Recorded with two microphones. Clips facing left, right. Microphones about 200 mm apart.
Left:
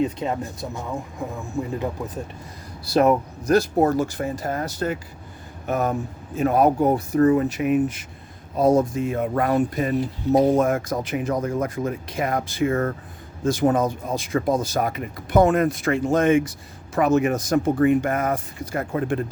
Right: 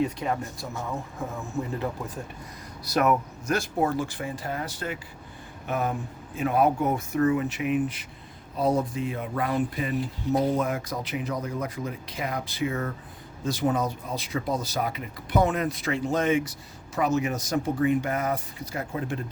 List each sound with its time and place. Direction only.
0.0 s speech: 20° left (ahead or behind)
2.8 s speech: 30° left (ahead or behind); by 19.2 s 55° left (ahead or behind)